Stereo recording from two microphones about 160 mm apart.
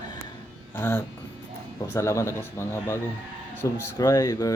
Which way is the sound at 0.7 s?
15° left (ahead or behind).